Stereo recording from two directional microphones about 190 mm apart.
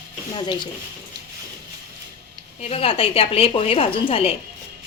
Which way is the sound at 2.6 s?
30° left (ahead or behind).